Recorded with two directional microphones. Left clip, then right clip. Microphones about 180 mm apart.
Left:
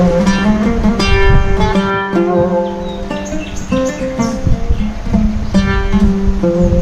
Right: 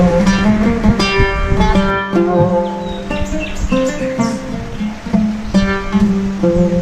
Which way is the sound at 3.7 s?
Centre (ahead or behind).